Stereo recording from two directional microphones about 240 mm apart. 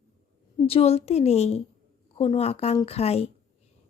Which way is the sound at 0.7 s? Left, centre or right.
Left.